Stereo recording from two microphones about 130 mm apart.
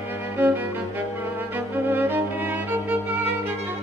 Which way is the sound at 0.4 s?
15° right (ahead or behind).